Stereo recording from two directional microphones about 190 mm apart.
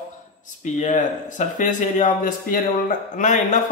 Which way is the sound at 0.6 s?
40° left (ahead or behind).